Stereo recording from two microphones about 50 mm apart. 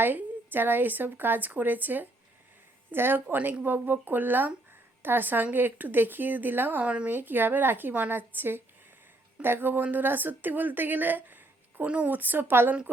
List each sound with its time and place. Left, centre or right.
0.0 s a woman's voice: right
6.8 s speech: right
7.1 s a woman's voice: right